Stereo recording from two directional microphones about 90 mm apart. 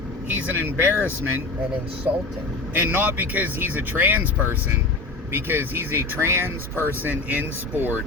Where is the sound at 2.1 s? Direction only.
25° right (ahead or behind).